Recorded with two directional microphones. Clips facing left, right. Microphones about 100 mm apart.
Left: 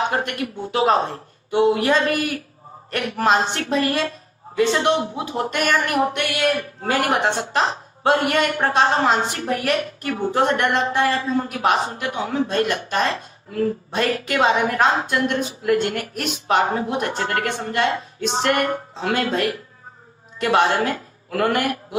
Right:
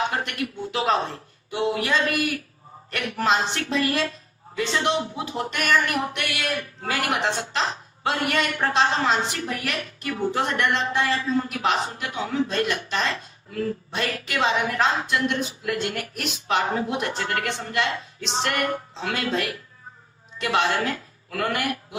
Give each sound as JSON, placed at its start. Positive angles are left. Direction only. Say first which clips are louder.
{"t": 0.1, "sound": "a woman's voice", "louder": "left 4 dB", "side_deg": 45}